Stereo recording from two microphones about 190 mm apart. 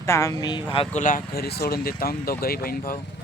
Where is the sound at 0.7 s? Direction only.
30° left (ahead or behind).